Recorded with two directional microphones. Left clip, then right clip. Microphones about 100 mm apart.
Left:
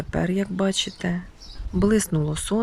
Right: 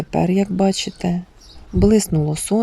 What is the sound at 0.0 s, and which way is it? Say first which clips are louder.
Speech: right 7 dB; 15° right (ahead or behind).